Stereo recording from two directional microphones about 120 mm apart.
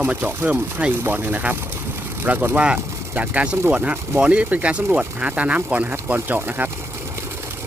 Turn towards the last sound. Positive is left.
turn(degrees=-15)  # may be behind; listen again after turning